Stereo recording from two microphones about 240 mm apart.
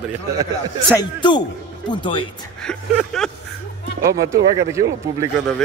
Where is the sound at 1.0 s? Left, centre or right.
Centre.